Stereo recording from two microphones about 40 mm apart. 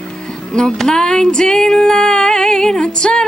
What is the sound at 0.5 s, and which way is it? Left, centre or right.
Female singing, centre.